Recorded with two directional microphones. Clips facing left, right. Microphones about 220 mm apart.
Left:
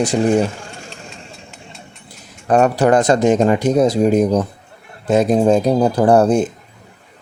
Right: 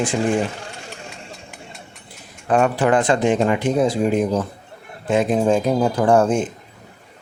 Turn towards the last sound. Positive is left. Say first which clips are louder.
# left 4 dB
turn(degrees=40)  # may be behind; listen again after turning